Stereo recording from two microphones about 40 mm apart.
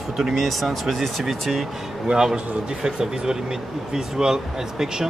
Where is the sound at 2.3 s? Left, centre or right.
Centre.